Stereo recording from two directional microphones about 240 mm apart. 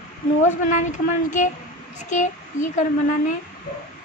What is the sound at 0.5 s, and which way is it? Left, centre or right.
A child's voice, left.